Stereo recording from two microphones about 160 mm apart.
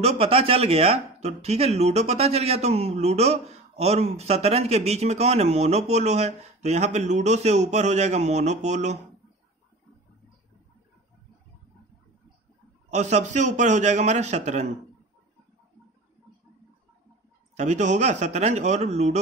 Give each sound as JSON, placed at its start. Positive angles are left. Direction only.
{"t": 0.0, "sound": "speech", "side_deg": -40}
{"t": 12.9, "sound": "a man's voice", "side_deg": -45}
{"t": 17.6, "sound": "a man's voice", "side_deg": -50}